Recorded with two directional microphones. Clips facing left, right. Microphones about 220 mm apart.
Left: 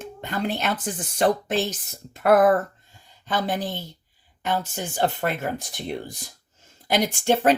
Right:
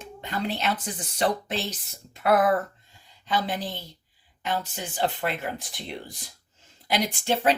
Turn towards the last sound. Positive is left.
turn(degrees=50)  # may be behind; listen again after turning